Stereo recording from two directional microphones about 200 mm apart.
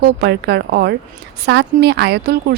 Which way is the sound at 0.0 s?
55° right (ahead or behind).